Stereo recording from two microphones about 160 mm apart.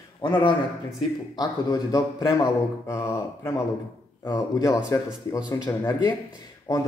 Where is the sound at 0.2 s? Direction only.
30° left (ahead or behind).